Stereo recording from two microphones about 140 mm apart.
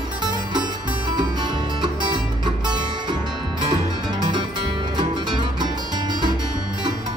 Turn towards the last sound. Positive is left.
turn(degrees=-30)  # may be behind; listen again after turning